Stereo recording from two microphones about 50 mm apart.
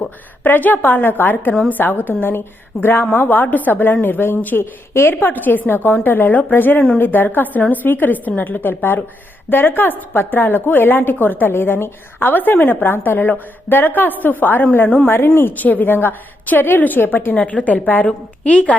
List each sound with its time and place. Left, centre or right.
0.0 s a woman's voice: left
15.5 s a woman's voice: left
17.3 s a woman's voice: left
18.0 s a woman's voice: left